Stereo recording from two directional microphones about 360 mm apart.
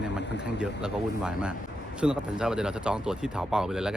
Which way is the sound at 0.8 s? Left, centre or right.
Centre.